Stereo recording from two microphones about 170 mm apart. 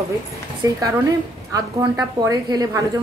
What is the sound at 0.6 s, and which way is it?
A woman's voice, 20° right (ahead or behind).